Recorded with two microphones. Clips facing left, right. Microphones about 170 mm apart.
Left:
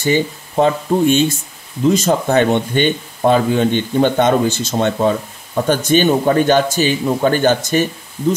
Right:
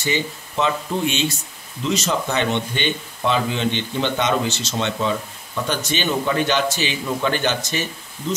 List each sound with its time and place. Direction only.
0.0 s speech: 50° left (ahead or behind)